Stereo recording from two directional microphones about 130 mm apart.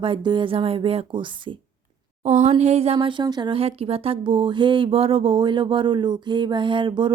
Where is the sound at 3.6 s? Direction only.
50° right (ahead or behind).